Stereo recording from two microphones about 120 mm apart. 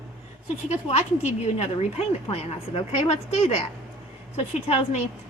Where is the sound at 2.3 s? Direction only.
55° left (ahead or behind).